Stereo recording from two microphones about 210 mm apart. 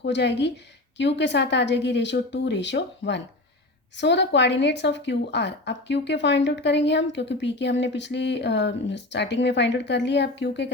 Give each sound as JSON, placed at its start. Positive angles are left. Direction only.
{"t": 0.0, "sound": "a woman's voice", "side_deg": 55}